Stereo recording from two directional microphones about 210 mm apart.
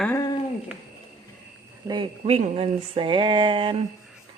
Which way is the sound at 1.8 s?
25° right (ahead or behind).